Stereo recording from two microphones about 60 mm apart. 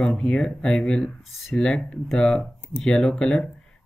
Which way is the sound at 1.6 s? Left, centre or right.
Centre.